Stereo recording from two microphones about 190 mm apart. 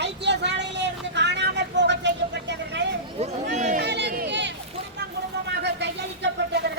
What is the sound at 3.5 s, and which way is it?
Chatter, 40° right (ahead or behind).